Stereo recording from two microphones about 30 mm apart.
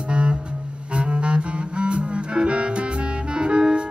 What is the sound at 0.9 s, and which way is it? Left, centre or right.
Double bass, right.